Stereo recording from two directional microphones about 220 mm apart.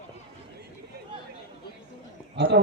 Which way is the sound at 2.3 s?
50° right (ahead or behind).